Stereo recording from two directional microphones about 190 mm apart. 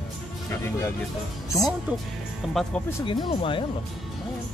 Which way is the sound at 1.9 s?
10° right (ahead or behind).